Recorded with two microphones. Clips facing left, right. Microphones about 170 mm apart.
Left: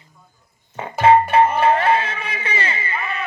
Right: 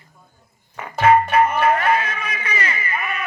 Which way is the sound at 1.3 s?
30° left (ahead or behind).